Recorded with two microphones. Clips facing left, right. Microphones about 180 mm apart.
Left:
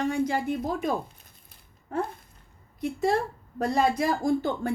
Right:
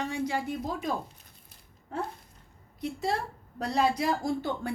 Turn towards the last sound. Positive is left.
turn(degrees=45)  # may be behind; listen again after turning